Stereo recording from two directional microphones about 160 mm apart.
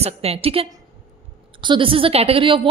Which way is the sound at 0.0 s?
40° right (ahead or behind).